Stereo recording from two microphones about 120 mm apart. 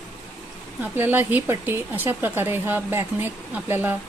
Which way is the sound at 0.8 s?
15° right (ahead or behind).